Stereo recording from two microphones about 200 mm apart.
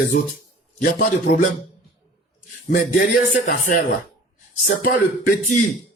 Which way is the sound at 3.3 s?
40° left (ahead or behind).